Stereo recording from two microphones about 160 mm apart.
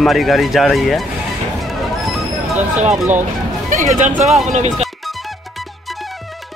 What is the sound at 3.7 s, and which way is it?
Speech, 50° right (ahead or behind).